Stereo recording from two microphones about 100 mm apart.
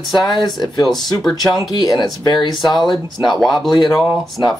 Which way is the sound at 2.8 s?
Centre (ahead or behind).